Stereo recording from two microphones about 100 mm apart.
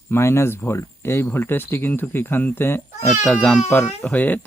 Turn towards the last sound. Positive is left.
turn(degrees=15)  # may be behind; listen again after turning